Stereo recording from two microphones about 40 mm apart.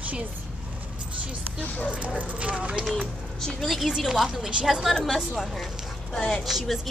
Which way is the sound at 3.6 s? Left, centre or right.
Centre.